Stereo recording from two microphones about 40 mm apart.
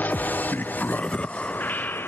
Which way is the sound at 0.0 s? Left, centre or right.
Left.